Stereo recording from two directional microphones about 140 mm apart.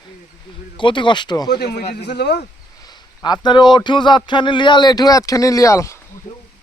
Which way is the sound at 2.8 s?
30° left (ahead or behind).